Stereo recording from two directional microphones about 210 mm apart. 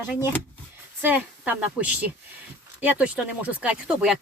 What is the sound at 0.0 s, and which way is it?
Speech, 10° right (ahead or behind).